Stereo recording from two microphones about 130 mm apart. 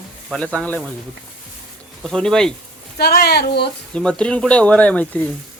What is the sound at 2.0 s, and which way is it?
Speech, 5° left (ahead or behind).